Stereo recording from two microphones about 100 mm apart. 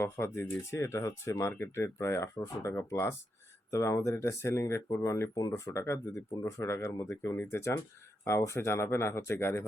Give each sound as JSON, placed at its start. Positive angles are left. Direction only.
{"t": 0.0, "sound": "speech", "side_deg": 25}